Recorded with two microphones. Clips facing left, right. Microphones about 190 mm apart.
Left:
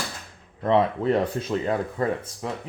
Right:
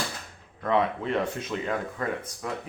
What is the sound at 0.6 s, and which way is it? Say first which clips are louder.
Speech: left 5 dB; 30° left (ahead or behind).